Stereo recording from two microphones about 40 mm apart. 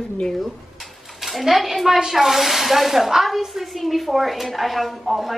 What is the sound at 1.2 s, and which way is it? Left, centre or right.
A woman's voice, centre.